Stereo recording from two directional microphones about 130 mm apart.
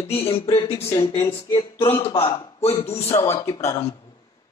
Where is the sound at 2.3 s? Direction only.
35° left (ahead or behind).